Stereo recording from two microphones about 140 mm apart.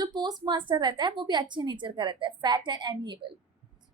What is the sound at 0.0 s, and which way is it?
A woman's voice, 30° right (ahead or behind).